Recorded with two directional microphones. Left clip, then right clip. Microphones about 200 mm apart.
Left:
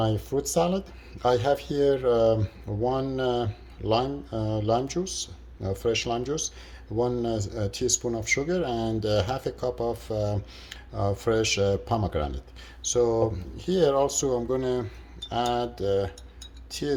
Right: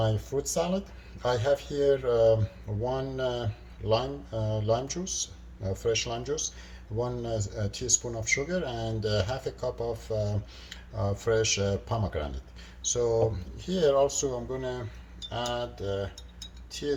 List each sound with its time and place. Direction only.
0.0 s speech: 40° left (ahead or behind); by 14.8 s 55° left (ahead or behind)
15.3 s cutlery: 55° left (ahead or behind)